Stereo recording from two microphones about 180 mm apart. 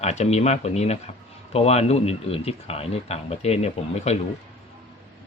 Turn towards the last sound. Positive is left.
turn(degrees=35)  # may be behind; listen again after turning